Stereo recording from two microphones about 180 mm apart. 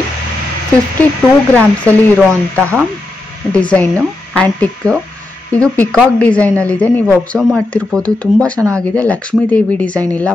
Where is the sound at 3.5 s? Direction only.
5° left (ahead or behind).